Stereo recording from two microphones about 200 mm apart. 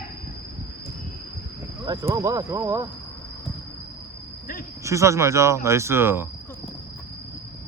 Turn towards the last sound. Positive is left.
turn(degrees=-10)  # may be behind; listen again after turning